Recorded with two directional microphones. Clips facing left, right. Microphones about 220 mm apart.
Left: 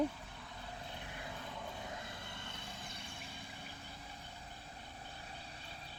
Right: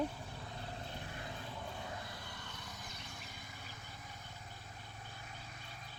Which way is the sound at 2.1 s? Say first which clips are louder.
Left 1 dB; 25° left (ahead or behind).